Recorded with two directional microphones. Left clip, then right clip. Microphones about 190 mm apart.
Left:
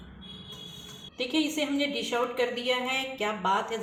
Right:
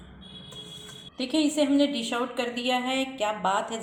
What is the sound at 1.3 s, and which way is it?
Speech, 40° right (ahead or behind).